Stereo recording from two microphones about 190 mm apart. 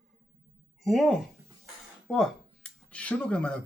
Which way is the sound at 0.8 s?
Centre (ahead or behind).